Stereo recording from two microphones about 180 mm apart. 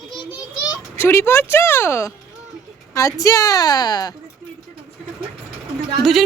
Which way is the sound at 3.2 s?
20° left (ahead or behind).